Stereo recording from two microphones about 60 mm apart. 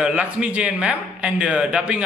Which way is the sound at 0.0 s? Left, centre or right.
Centre.